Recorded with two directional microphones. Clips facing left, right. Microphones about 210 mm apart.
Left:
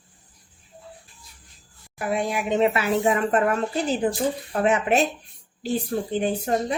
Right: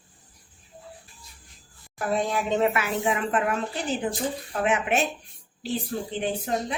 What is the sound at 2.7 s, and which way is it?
A woman's voice, 35° left (ahead or behind).